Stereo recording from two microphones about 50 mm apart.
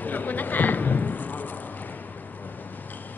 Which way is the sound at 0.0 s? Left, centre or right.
Left.